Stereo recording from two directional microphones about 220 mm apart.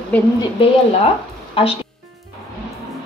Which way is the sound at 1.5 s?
25° left (ahead or behind).